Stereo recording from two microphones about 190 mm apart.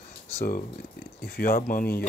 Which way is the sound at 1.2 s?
50° left (ahead or behind).